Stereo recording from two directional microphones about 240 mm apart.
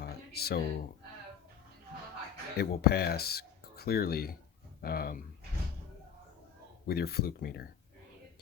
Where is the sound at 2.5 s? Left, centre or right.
Left.